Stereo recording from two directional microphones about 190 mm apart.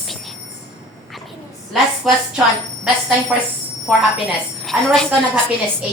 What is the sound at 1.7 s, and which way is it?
Speech, centre (ahead or behind).